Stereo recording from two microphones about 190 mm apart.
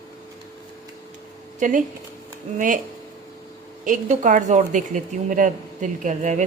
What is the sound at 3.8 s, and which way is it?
A woman's voice, 45° right (ahead or behind).